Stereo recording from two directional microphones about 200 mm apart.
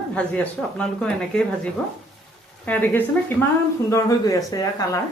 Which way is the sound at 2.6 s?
10° left (ahead or behind).